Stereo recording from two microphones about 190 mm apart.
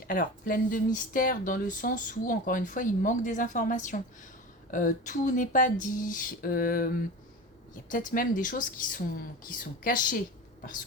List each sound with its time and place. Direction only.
0.1 s speech: 45° left (ahead or behind)